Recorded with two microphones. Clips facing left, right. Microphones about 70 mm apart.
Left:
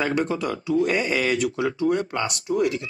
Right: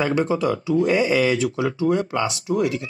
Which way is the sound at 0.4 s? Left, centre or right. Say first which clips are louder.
Right 3 dB; centre.